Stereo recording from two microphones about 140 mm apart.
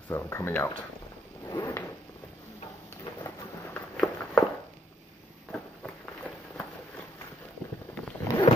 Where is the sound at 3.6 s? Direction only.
10° left (ahead or behind).